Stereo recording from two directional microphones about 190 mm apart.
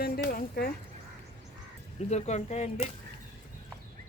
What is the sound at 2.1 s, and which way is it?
Speech, 35° left (ahead or behind).